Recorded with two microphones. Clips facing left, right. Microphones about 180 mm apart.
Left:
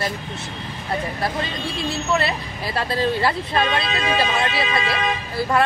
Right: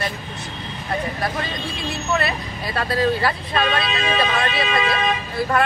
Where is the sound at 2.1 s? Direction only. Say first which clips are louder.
Right 1 dB; 30° left (ahead or behind).